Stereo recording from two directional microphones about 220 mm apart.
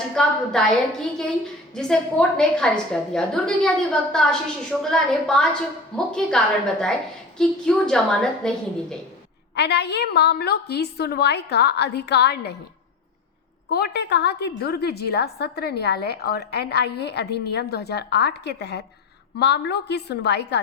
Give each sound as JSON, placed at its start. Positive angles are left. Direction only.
{"t": 0.2, "sound": "a woman's voice", "side_deg": 5}
{"t": 9.6, "sound": "a woman's voice", "side_deg": 50}
{"t": 13.7, "sound": "a woman's voice", "side_deg": 45}